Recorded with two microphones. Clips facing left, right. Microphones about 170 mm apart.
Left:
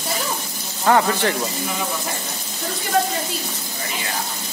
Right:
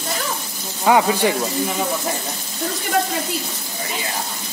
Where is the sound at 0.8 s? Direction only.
10° right (ahead or behind).